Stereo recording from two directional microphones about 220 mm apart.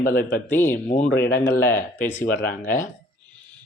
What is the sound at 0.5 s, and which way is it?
Speech, 10° left (ahead or behind).